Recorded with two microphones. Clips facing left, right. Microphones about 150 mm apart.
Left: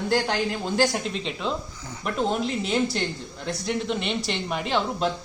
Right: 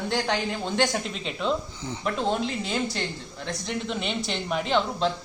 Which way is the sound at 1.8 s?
30° right (ahead or behind).